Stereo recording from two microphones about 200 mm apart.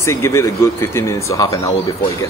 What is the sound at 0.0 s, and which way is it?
Speech, 15° left (ahead or behind).